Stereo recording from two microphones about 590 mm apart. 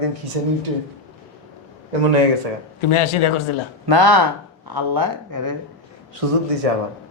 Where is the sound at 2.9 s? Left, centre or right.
Left.